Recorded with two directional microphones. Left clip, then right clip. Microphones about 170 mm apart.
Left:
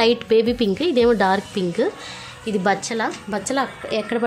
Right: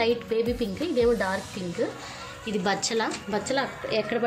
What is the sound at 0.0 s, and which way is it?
A woman's voice, 65° left (ahead or behind).